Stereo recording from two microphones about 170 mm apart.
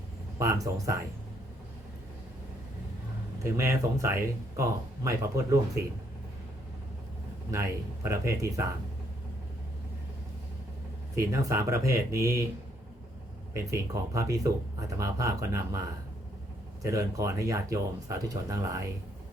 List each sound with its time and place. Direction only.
0.3 s speech: 20° right (ahead or behind)
3.4 s speech: 15° right (ahead or behind)
8.0 s speech: 15° right (ahead or behind)
11.1 s speech: 15° right (ahead or behind)
13.5 s speech: 20° right (ahead or behind)
16.8 s speech: 20° right (ahead or behind)